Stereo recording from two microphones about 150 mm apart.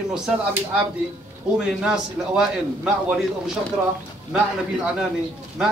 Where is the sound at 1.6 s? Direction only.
5° right (ahead or behind).